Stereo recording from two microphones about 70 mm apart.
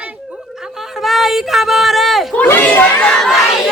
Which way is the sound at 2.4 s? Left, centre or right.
Left.